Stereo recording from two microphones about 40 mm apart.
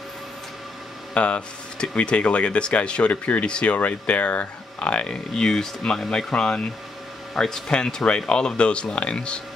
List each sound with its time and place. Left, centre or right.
1.1 s speech: left
5.3 s speech: centre